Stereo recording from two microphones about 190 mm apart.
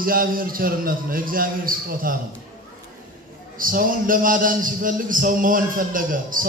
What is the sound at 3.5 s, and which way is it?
A man's voice, 45° right (ahead or behind).